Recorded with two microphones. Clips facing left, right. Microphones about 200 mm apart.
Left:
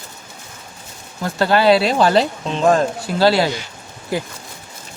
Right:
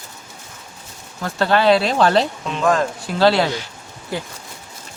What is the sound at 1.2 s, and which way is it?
Speech, 5° left (ahead or behind).